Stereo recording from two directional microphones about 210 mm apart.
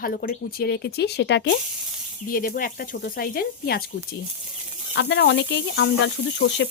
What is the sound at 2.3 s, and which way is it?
Speech, 45° left (ahead or behind).